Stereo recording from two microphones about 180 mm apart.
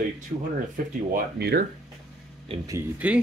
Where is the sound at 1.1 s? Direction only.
60° right (ahead or behind).